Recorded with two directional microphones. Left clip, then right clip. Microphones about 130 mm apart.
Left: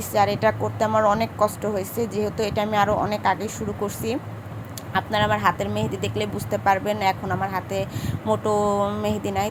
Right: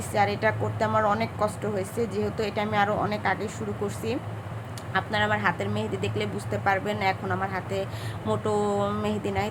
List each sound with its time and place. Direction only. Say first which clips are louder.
0.1 s speech: left 4 dB; 25° left (ahead or behind)